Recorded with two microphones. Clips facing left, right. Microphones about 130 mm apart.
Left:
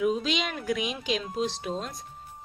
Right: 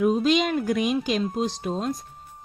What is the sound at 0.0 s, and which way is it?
Speech, 45° right (ahead or behind).